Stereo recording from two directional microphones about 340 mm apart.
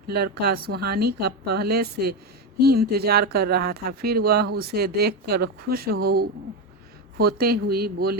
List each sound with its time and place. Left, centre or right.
0.1 s speech: right